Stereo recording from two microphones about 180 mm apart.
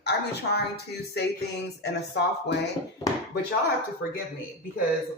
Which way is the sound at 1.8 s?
70° left (ahead or behind).